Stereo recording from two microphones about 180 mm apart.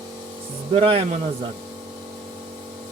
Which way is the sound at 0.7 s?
30° right (ahead or behind).